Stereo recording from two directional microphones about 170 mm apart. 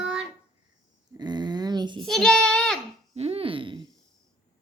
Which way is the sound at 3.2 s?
35° right (ahead or behind).